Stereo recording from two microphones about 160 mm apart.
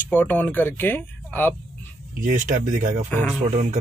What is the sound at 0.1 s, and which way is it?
Speech, 10° left (ahead or behind).